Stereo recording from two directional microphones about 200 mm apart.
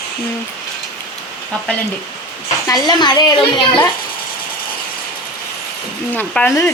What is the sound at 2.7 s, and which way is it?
A woman's voice, 20° left (ahead or behind).